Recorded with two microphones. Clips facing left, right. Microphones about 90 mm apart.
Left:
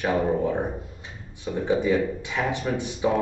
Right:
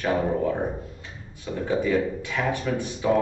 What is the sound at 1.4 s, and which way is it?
Speech, 20° left (ahead or behind).